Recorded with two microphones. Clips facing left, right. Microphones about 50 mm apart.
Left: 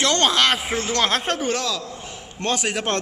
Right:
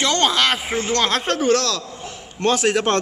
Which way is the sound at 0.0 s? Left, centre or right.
Centre.